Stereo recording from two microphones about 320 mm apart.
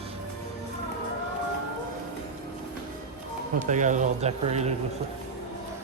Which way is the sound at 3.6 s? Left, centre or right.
Right.